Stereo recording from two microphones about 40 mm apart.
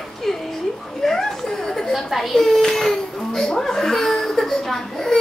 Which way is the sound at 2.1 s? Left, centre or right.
Centre.